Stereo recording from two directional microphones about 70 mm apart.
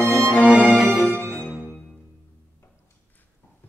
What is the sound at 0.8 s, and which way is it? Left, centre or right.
Music, centre.